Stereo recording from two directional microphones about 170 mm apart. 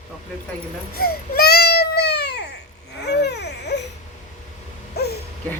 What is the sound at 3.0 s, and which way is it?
Baby cry, 85° left.